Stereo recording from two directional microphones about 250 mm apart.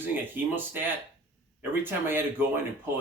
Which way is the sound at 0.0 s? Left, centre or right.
Centre.